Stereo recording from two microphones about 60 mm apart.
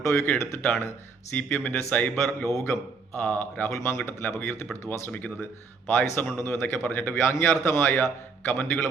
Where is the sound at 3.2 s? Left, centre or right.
Left.